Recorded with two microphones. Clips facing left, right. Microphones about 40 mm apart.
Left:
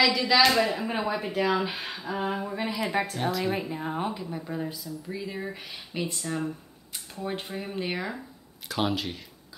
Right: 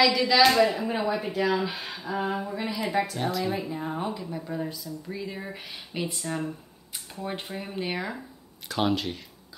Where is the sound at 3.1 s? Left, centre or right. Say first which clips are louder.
Even; centre.